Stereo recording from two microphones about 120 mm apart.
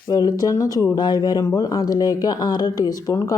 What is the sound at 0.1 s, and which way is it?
Speech, 35° left (ahead or behind).